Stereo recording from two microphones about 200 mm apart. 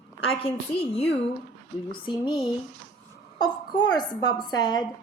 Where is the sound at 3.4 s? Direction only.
20° left (ahead or behind).